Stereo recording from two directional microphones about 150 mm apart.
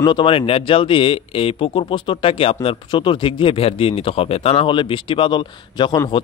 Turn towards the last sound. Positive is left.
turn(degrees=30)  # may be behind; listen again after turning